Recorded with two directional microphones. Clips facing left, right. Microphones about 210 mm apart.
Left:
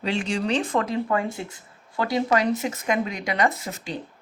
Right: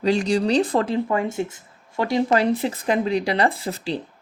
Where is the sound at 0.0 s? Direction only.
40° right (ahead or behind).